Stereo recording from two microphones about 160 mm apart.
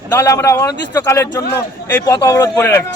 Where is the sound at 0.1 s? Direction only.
20° left (ahead or behind).